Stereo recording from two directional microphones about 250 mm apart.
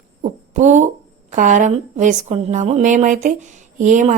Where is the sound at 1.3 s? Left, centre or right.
Right.